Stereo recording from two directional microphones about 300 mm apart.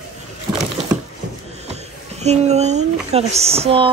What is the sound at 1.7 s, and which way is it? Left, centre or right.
Speech, right.